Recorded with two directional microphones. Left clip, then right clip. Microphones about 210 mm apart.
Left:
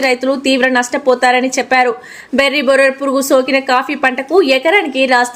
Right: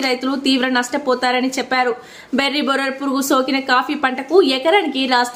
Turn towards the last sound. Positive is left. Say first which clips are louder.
# left 5 dB
turn(degrees=10)  # may be behind; listen again after turning